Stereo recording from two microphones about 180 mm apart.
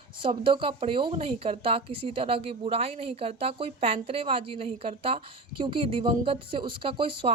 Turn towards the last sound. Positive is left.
turn(degrees=-30)  # may be behind; listen again after turning